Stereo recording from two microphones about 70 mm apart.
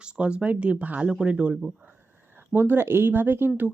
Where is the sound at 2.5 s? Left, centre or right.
Right.